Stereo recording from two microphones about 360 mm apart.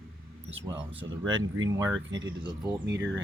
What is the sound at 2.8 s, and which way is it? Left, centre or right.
Speech, right.